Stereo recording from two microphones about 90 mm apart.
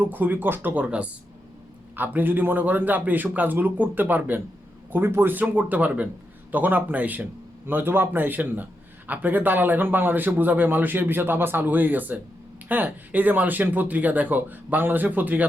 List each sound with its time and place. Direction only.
0.0 s speech: 20° right (ahead or behind)